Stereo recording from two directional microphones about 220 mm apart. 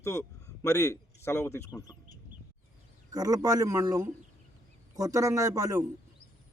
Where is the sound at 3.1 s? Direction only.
15° right (ahead or behind).